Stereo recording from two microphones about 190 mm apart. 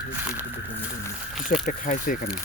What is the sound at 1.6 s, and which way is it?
Speech, 45° left (ahead or behind).